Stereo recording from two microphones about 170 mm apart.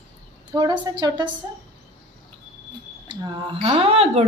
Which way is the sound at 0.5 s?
25° right (ahead or behind).